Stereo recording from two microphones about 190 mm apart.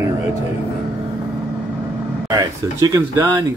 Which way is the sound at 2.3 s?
20° right (ahead or behind).